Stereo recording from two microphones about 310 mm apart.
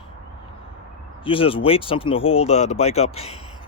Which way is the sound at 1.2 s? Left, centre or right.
Centre.